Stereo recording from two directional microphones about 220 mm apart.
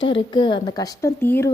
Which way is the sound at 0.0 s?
25° left (ahead or behind).